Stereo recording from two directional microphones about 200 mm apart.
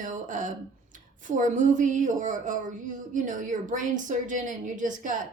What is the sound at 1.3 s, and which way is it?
A woman's voice, 40° right (ahead or behind).